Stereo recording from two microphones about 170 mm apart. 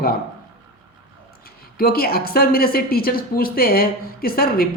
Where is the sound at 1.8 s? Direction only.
60° left (ahead or behind).